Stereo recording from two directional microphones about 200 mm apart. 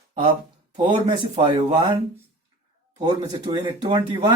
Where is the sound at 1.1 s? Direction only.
20° right (ahead or behind).